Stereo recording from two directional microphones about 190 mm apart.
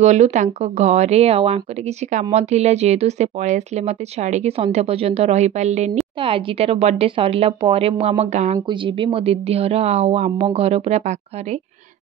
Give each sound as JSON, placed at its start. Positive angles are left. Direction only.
{"t": 0.0, "sound": "speech", "side_deg": -40}
{"t": 8.5, "sound": "speech", "side_deg": -25}